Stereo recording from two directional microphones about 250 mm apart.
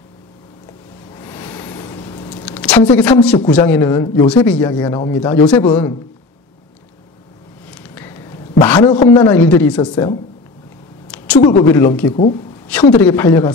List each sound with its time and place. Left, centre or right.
1.1 s a sound: centre
2.4 s a woman's voice: centre
7.6 s a sound: centre
8.8 s speech: centre
9.3 s speech: centre
11.1 s a sound: centre
11.6 s speech: centre
12.1 s speech: left
12.9 s speech: centre